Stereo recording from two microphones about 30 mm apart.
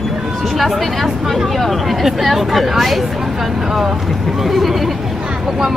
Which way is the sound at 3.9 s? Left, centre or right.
Centre.